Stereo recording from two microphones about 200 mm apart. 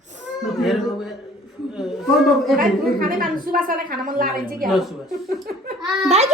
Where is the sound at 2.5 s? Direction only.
45° right (ahead or behind).